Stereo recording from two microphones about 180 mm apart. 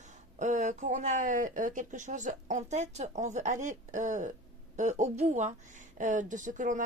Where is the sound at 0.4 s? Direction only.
40° right (ahead or behind).